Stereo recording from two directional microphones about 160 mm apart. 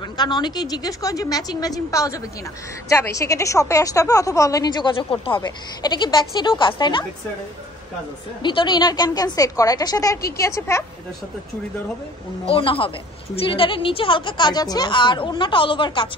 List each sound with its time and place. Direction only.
0.0 s a woman's voice: 25° left (ahead or behind)
8.4 s a woman's voice: 30° left (ahead or behind)
12.4 s a woman's voice: 35° left (ahead or behind)